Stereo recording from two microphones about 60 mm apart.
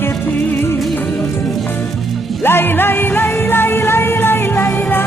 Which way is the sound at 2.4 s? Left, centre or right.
Left.